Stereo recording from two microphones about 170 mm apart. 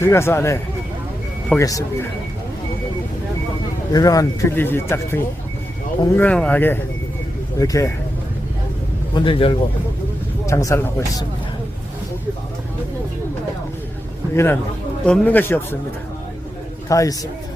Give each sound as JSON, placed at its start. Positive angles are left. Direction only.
{"t": 0.0, "sound": "speech", "side_deg": 15}
{"t": 3.9, "sound": "speech", "side_deg": 20}
{"t": 9.1, "sound": "a man's voice", "side_deg": 30}
{"t": 10.4, "sound": "speech", "side_deg": 20}
{"t": 14.3, "sound": "speech", "side_deg": 15}
{"t": 16.9, "sound": "speech", "side_deg": 20}